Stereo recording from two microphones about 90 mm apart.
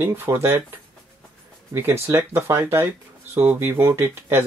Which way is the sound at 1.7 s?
25° right (ahead or behind).